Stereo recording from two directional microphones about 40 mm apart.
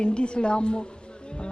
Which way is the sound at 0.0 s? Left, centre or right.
Left.